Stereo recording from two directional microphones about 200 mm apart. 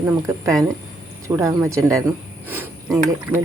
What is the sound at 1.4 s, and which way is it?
Speech, 15° right (ahead or behind).